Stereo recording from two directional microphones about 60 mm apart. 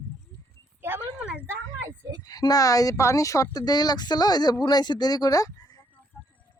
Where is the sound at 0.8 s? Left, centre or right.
Right.